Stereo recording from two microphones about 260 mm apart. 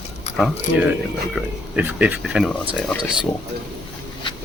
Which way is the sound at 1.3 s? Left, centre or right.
Centre.